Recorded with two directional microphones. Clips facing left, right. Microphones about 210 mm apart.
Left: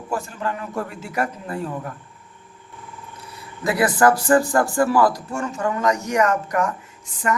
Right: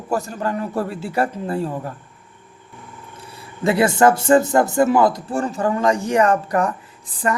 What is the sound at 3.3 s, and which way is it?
Speech, 25° right (ahead or behind).